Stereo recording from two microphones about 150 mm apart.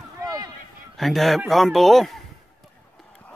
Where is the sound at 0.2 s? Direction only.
25° right (ahead or behind).